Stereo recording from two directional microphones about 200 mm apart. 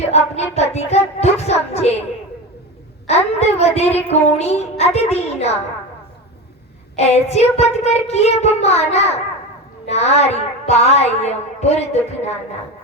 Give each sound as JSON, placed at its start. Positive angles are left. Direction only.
{"t": 0.1, "sound": "child singing", "side_deg": 35}
{"t": 3.1, "sound": "a sound", "side_deg": 35}
{"t": 3.4, "sound": "speech", "side_deg": 30}
{"t": 6.9, "sound": "speech", "side_deg": 35}